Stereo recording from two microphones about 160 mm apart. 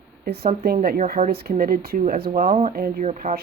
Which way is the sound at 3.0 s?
45° right (ahead or behind).